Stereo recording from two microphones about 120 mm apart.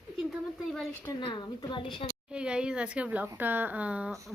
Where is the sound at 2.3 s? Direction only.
10° right (ahead or behind).